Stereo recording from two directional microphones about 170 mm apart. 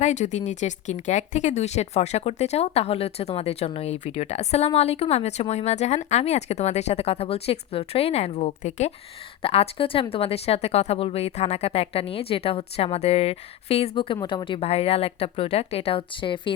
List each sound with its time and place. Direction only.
0.0 s speech: 45° left (ahead or behind); by 16.5 s 30° left (ahead or behind)